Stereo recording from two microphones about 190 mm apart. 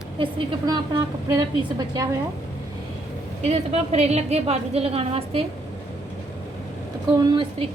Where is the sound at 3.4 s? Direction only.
35° right (ahead or behind).